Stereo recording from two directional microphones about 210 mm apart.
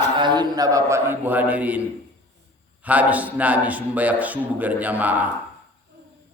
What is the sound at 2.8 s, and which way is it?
Speech, 5° right (ahead or behind).